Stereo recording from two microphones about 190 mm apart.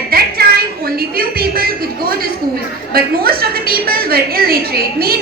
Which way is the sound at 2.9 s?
50° right (ahead or behind).